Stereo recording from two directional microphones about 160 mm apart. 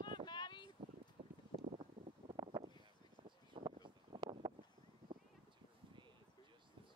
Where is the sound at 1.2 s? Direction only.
40° right (ahead or behind).